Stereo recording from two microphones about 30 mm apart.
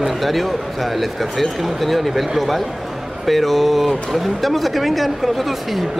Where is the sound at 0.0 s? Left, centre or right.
Centre.